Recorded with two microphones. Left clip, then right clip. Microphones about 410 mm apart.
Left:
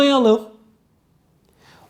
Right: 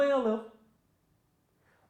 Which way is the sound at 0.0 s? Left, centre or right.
Left.